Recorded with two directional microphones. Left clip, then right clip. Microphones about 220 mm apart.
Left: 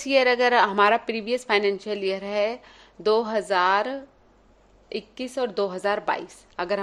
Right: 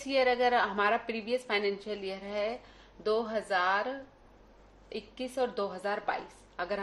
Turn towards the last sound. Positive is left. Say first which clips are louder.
# left 8 dB
turn(degrees=50)  # may be behind; listen again after turning